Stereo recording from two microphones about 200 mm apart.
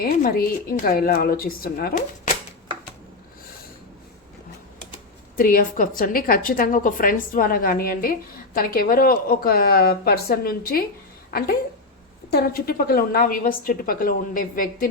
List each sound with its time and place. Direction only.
0.0 s a woman's voice: 45° left (ahead or behind)
5.4 s a woman's voice: 45° left (ahead or behind)